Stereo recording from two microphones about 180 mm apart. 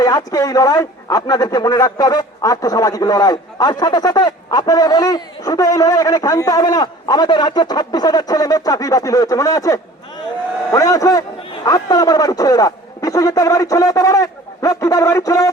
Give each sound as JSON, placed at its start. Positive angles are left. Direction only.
{"t": 0.0, "sound": "a man's voice", "side_deg": 20}